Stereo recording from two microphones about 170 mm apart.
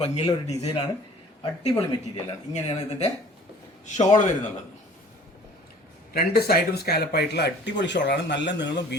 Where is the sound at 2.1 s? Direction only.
35° left (ahead or behind).